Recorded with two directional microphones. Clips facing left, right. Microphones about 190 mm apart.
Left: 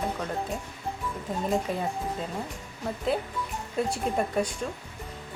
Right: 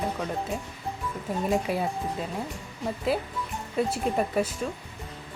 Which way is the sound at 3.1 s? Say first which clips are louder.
Even; centre (ahead or behind).